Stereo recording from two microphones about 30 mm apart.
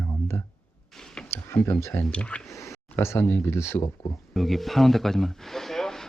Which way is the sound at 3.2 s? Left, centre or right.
Left.